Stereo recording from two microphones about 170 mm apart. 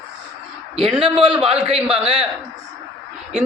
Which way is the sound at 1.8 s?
5° right (ahead or behind).